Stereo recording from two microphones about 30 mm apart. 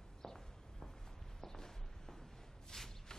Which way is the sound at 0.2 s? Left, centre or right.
Centre.